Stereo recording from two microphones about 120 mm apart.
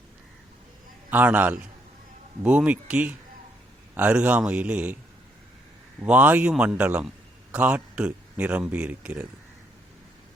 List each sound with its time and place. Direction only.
1.1 s speech: 15° right (ahead or behind)
6.0 s speech: 15° right (ahead or behind)